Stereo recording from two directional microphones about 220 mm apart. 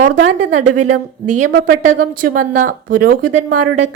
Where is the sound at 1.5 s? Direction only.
50° right (ahead or behind).